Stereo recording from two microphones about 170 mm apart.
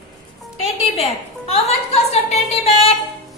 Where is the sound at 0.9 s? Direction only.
35° left (ahead or behind).